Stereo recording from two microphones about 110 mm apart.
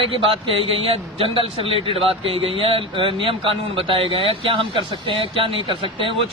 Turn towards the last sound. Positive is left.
turn(degrees=-50)  # may be behind; listen again after turning